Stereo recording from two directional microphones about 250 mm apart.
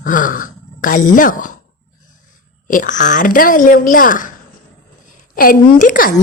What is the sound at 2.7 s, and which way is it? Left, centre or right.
Speech, left.